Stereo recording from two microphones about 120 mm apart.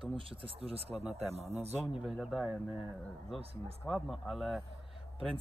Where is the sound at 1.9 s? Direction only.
5° right (ahead or behind).